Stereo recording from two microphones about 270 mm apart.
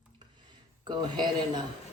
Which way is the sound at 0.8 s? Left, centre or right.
Centre.